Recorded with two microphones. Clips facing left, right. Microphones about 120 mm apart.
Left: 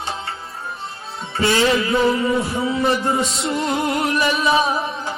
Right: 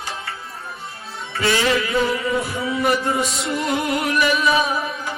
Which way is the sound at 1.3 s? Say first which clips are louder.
Left 2 dB; 25° left (ahead or behind).